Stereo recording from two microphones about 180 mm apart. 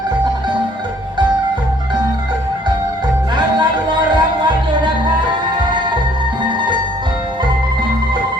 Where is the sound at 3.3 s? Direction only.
25° right (ahead or behind).